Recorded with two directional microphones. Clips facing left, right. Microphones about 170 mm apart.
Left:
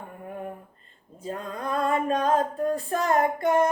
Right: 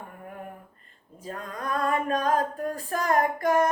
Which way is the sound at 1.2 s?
25° left (ahead or behind).